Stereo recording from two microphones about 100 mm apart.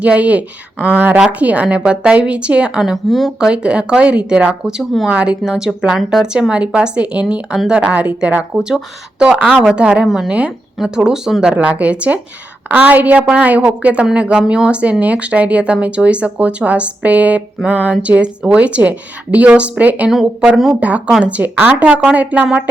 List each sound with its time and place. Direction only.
0.0 s a woman's voice: 15° right (ahead or behind)
3.5 s a woman's voice: 10° right (ahead or behind)
5.0 s a woman's voice: 10° right (ahead or behind)
20.7 s a woman's voice: 15° right (ahead or behind)